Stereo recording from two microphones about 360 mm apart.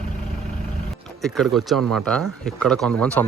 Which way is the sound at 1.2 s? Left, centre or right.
Centre.